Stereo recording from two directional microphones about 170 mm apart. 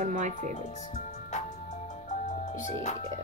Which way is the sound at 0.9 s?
45° left (ahead or behind).